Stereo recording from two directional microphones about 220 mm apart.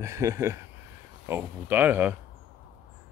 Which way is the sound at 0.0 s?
15° right (ahead or behind).